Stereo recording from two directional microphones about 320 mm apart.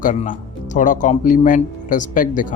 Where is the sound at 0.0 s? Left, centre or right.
Left.